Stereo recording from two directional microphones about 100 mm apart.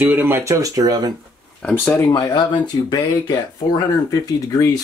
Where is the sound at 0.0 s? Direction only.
20° right (ahead or behind); by 1.1 s 40° right (ahead or behind).